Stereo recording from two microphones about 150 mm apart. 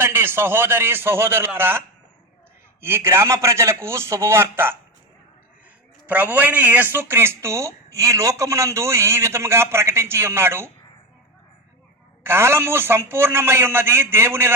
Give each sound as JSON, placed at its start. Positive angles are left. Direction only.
{"t": 0.0, "sound": "speech", "side_deg": -15}
{"t": 2.8, "sound": "speech", "side_deg": -15}
{"t": 6.1, "sound": "speech", "side_deg": -10}
{"t": 12.2, "sound": "speech", "side_deg": -15}